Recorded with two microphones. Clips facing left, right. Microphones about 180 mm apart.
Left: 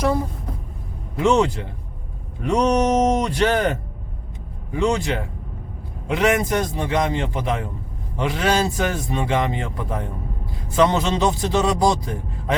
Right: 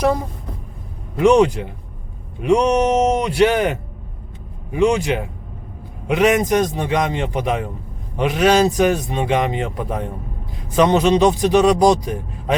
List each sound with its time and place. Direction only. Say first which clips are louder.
1.2 s a man's voice: right 5 dB; 15° right (ahead or behind)